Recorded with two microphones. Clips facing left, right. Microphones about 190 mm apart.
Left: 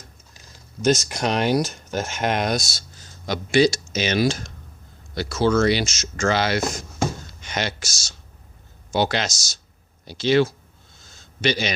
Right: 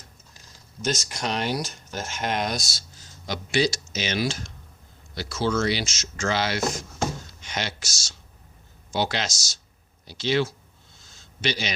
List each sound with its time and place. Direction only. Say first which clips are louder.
0.8 s a man's voice: left 8 dB; 55° left (ahead or behind)